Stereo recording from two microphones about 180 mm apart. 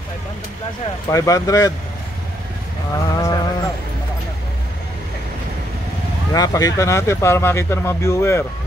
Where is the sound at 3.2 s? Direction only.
20° left (ahead or behind).